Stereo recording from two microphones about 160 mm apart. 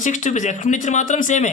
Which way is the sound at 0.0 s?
50° left (ahead or behind).